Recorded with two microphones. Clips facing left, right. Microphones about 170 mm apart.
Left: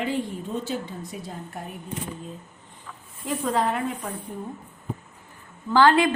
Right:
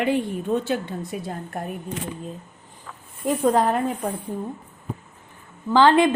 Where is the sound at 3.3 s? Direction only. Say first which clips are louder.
Right 5 dB; 40° right (ahead or behind).